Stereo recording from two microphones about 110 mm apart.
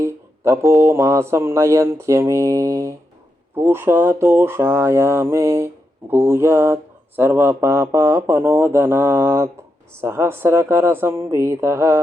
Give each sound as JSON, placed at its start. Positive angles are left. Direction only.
{"t": 0.0, "sound": "speech", "side_deg": -25}